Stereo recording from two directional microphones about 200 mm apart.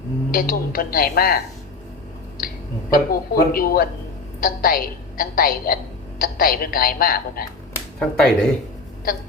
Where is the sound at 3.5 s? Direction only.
45° left (ahead or behind).